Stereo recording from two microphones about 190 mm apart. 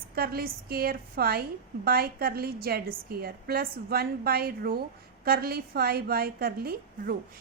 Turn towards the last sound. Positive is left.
turn(degrees=-55)  # may be behind; listen again after turning